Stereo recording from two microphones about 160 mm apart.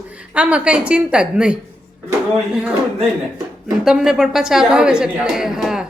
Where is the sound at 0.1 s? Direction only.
10° right (ahead or behind).